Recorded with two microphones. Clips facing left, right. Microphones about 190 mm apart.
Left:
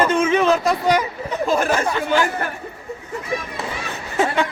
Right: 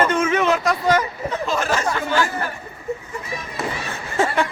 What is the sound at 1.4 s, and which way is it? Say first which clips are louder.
Speech: left 5 dB; 50° left (ahead or behind).